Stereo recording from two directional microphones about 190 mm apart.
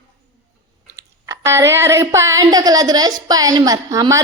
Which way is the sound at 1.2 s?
15° right (ahead or behind).